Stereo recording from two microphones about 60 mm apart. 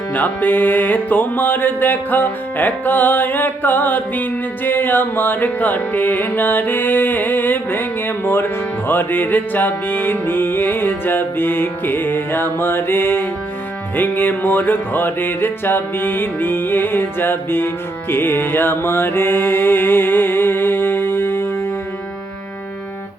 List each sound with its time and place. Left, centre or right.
0.1 s music: left